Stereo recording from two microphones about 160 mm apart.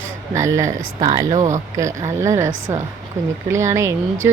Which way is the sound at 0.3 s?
20° right (ahead or behind).